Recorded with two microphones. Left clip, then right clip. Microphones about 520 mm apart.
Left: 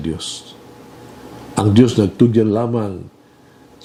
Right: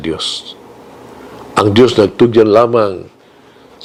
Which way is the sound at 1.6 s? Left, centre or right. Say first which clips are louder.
Right 6 dB; right.